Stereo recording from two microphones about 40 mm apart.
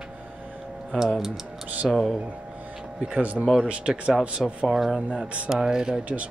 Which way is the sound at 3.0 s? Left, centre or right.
Right.